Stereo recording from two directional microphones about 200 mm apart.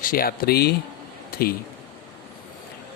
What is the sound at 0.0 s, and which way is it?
Speech, 45° left (ahead or behind).